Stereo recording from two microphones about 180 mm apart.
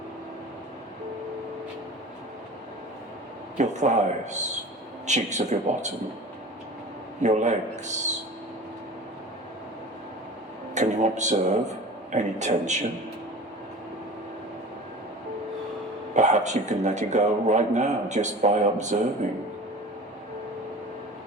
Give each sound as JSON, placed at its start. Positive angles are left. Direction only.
{"t": 3.6, "sound": "a man's voice", "side_deg": -40}
{"t": 7.2, "sound": "a man's voice", "side_deg": -40}
{"t": 10.8, "sound": "a sound", "side_deg": -40}
{"t": 12.1, "sound": "a man's voice", "side_deg": -40}
{"t": 16.1, "sound": "a man's voice", "side_deg": -40}